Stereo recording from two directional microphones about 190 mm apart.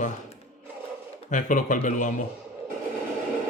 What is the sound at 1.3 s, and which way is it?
Speech, 40° left (ahead or behind).